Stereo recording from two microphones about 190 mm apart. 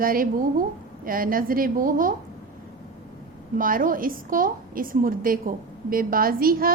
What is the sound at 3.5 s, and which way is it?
A woman's voice, 45° right (ahead or behind).